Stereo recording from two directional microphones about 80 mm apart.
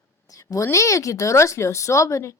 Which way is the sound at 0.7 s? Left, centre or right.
Left.